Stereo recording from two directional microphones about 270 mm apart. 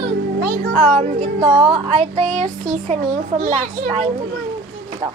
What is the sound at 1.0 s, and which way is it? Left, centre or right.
Music, right.